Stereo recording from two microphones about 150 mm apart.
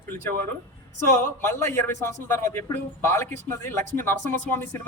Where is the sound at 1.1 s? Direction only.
15° left (ahead or behind).